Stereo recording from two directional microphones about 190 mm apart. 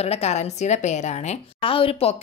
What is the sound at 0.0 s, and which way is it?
A woman's voice, 35° left (ahead or behind).